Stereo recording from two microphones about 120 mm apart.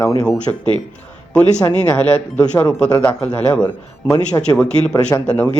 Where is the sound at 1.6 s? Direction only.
20° left (ahead or behind).